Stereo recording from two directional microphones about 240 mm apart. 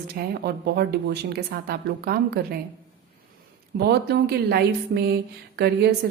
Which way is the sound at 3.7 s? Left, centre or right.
Right.